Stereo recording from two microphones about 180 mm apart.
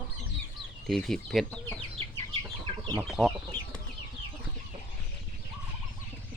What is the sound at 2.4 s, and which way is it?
Chicken, 20° right (ahead or behind).